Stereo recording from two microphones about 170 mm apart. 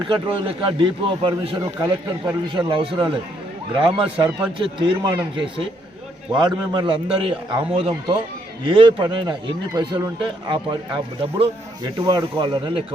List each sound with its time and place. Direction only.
0.0 s a man's voice: 30° right (ahead or behind)